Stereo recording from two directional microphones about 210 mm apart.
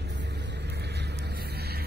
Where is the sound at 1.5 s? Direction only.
50° right (ahead or behind).